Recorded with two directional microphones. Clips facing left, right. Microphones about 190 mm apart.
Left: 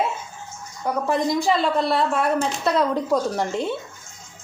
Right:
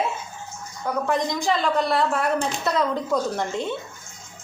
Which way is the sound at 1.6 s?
30° left (ahead or behind).